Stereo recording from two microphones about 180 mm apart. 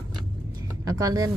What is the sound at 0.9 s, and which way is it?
Speech, 20° right (ahead or behind).